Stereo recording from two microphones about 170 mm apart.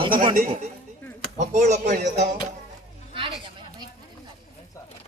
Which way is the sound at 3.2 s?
30° right (ahead or behind).